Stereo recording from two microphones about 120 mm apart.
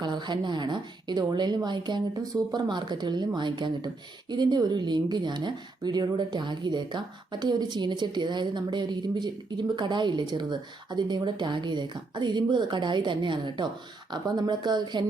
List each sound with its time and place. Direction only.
0.0 s speech: 40° right (ahead or behind)